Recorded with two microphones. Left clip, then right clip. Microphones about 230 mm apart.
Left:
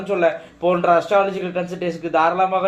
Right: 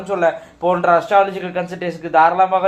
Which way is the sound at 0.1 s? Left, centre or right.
Centre.